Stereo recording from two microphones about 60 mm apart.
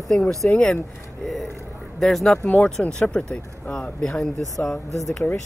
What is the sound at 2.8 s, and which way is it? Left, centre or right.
Speech, left.